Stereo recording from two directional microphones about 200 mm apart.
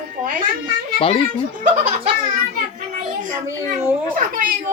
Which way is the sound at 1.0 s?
30° left (ahead or behind).